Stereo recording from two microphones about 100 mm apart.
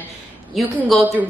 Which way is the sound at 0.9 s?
Centre (ahead or behind).